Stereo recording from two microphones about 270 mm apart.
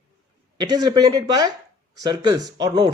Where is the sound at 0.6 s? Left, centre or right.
Centre.